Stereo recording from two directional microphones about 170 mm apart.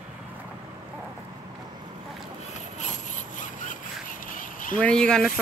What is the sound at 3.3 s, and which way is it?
Sawing, 50° left (ahead or behind).